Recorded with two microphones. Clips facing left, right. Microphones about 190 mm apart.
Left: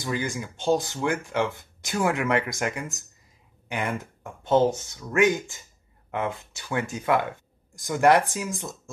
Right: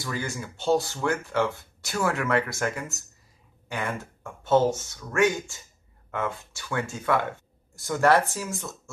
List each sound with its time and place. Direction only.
0.0 s speech: 15° left (ahead or behind)